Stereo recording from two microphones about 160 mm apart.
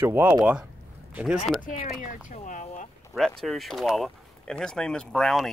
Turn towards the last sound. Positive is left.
turn(degrees=0)  # may be behind; listen again after turning